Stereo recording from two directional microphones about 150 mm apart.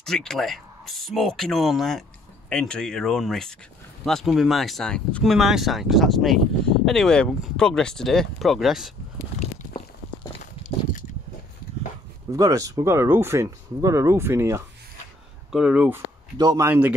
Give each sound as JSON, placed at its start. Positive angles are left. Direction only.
{"t": 0.0, "sound": "speech", "side_deg": 5}
{"t": 10.4, "sound": "a sound", "side_deg": 60}
{"t": 12.3, "sound": "speech", "side_deg": -20}
{"t": 16.3, "sound": "speech", "side_deg": -25}